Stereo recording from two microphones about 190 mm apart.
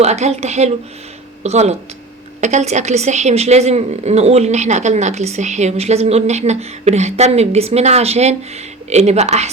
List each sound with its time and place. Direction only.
0.0 s a woman's voice: 35° right (ahead or behind)